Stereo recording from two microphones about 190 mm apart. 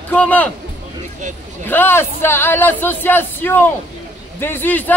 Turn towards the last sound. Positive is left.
turn(degrees=10)  # may be behind; listen again after turning